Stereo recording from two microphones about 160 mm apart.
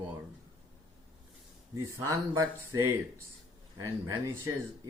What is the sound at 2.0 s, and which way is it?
Speech, 20° right (ahead or behind).